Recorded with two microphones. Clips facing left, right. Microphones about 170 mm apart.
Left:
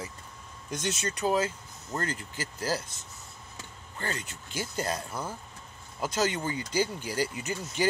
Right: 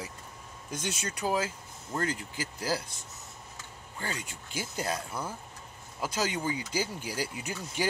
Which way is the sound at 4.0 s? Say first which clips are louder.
Left 2 dB; 10° right (ahead or behind).